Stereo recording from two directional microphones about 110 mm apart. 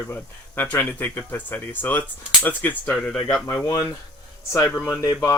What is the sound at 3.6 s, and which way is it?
Speech, 30° left (ahead or behind).